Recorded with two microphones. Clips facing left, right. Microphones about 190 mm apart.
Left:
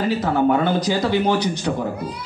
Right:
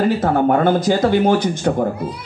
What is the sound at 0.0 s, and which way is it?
Speech, 50° right (ahead or behind).